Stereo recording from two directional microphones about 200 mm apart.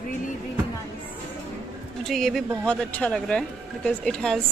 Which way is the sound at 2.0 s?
Centre (ahead or behind).